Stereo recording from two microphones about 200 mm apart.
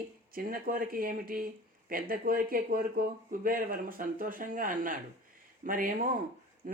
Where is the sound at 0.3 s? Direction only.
45° right (ahead or behind).